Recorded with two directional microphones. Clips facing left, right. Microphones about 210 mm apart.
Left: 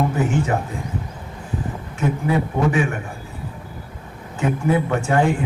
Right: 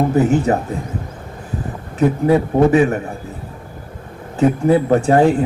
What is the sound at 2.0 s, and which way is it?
Speech, 40° right (ahead or behind).